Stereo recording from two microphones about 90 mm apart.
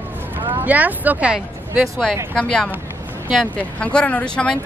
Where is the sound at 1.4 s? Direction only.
Centre (ahead or behind).